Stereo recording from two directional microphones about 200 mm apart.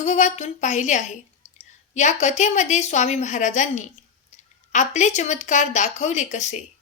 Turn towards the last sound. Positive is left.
turn(degrees=35)  # may be behind; listen again after turning